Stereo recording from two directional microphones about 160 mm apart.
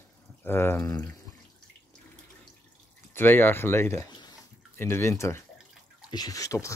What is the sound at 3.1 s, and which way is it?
Speech, 15° left (ahead or behind).